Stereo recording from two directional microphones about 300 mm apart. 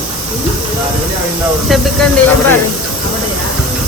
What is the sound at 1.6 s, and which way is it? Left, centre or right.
Speech, centre.